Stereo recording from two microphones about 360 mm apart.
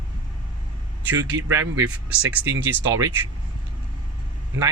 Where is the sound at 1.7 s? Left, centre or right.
Centre.